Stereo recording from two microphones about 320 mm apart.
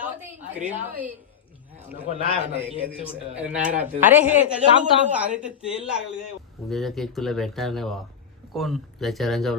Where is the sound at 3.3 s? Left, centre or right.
Centre.